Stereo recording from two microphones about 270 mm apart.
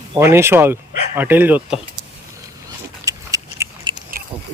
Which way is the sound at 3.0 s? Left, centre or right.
Centre.